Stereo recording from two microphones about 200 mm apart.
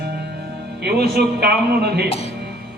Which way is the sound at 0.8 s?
55° right (ahead or behind).